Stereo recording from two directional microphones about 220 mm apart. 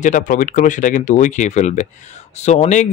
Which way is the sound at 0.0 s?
35° left (ahead or behind).